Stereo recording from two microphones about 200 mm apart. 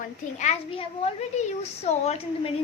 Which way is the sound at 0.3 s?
30° left (ahead or behind).